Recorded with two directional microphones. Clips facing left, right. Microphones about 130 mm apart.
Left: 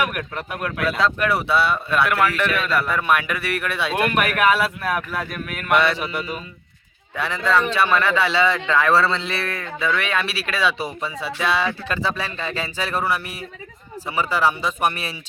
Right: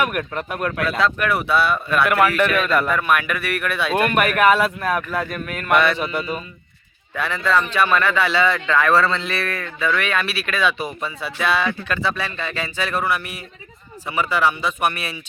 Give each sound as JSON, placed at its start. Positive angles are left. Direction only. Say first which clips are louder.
{"t": 0.0, "sound": "speech", "louder": "right 2 dB", "side_deg": 5}
{"t": 1.0, "sound": "speech", "louder": "even", "side_deg": 30}
{"t": 2.0, "sound": "speech", "louder": "right 3 dB", "side_deg": 0}
{"t": 2.9, "sound": "speech", "louder": "right 1 dB", "side_deg": 25}
{"t": 3.9, "sound": "a man's voice", "louder": "right 3 dB", "side_deg": 5}
{"t": 7.2, "sound": "speech", "louder": "even", "side_deg": 25}